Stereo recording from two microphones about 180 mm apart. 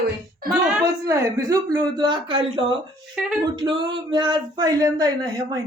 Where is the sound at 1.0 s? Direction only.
15° right (ahead or behind).